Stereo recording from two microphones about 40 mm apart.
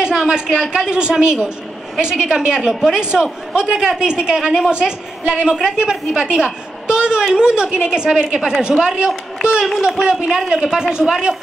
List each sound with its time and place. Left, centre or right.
0.0 s a woman's voice: centre